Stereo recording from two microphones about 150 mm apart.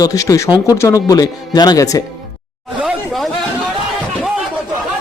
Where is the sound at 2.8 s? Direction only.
Centre (ahead or behind).